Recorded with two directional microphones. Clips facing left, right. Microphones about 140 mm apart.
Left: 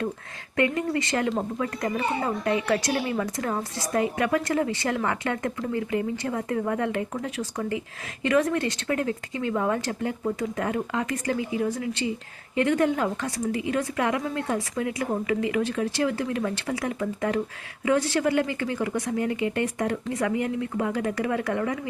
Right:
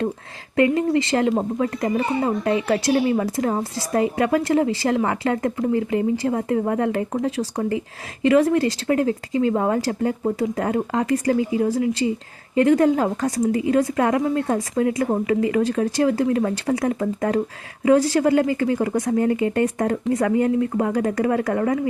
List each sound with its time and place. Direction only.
0.5 s speech: 30° right (ahead or behind)